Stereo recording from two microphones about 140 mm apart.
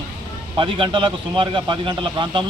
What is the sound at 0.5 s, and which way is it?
Speech, 35° right (ahead or behind).